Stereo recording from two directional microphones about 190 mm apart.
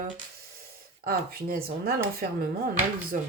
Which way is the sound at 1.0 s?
50° right (ahead or behind).